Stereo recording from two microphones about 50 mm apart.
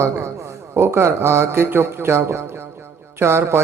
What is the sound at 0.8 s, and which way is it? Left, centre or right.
A man's voice, right.